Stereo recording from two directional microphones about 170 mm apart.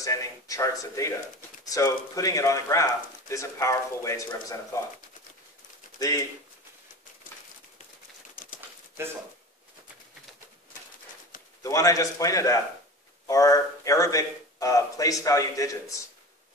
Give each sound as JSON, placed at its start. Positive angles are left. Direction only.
{"t": 0.0, "sound": "speech", "side_deg": 20}
{"t": 5.9, "sound": "speech", "side_deg": 20}
{"t": 8.5, "sound": "pigeon", "side_deg": -15}
{"t": 11.6, "sound": "speech", "side_deg": 20}